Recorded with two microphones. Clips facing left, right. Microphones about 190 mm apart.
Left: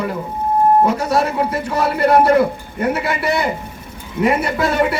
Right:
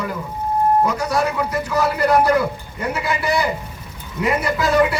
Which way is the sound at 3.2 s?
25° left (ahead or behind).